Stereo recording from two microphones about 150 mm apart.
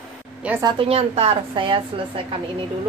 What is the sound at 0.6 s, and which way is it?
A woman's voice, 40° right (ahead or behind).